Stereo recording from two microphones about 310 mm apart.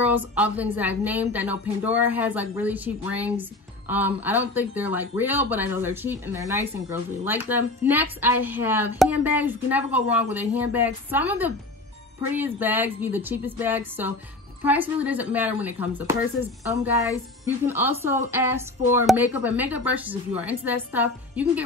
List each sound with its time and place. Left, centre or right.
0.4 s a woman's voice: centre
17.6 s a woman's voice: centre